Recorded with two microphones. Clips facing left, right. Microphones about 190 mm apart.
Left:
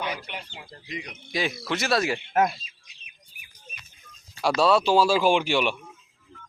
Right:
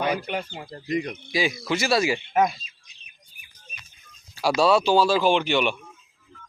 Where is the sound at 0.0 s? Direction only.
50° right (ahead or behind).